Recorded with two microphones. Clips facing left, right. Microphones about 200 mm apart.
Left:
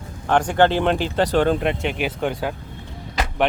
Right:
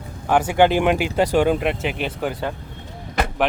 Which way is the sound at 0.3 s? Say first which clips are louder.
Right 1 dB; 10° right (ahead or behind).